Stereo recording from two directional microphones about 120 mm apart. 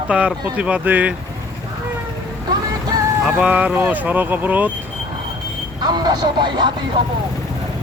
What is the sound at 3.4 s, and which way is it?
Speech, 10° right (ahead or behind).